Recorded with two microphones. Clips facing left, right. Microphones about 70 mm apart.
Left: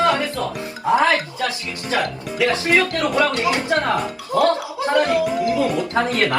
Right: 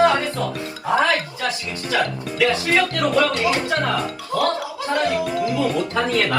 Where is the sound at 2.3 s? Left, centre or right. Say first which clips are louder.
Left 1 dB; left.